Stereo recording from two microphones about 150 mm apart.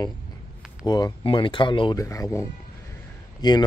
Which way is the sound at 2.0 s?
20° left (ahead or behind).